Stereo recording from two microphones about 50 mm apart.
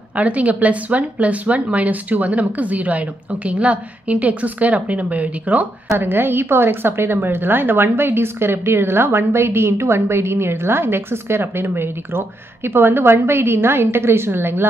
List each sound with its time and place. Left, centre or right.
0.1 s a woman's voice: right
5.9 s a woman's voice: right